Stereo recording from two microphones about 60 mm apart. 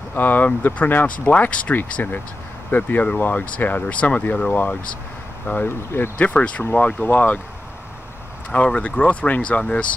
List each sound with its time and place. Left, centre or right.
0.1 s speech: left
5.7 s speech: left
6.1 s speech: left
8.6 s speech: left